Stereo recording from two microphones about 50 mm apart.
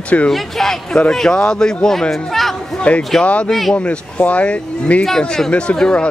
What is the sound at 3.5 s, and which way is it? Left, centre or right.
Speech, centre.